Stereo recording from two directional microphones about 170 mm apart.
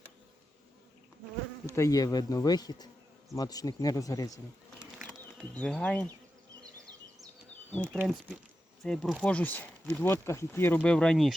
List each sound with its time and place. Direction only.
1.7 s speech: 20° left (ahead or behind)
4.9 s bee: 5° left (ahead or behind)
7.8 s speech: 10° right (ahead or behind)
8.8 s speech: 5° left (ahead or behind)